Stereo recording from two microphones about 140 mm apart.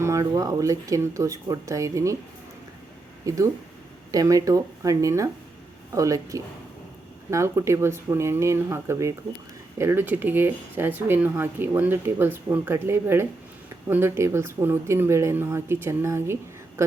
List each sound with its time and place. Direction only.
0.0 s speech: 20° right (ahead or behind)
3.2 s speech: 25° right (ahead or behind)